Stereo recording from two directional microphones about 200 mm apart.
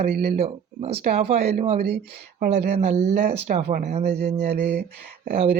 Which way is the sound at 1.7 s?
55° right (ahead or behind).